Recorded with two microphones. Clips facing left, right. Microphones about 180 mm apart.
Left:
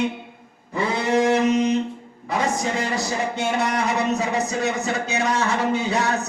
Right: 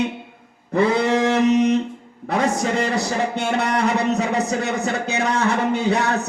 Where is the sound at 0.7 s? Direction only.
65° right (ahead or behind).